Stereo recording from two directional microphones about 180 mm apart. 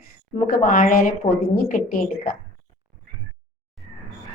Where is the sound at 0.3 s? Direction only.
45° left (ahead or behind).